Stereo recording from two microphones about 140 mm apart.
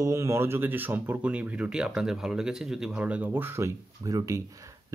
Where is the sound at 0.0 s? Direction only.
20° right (ahead or behind).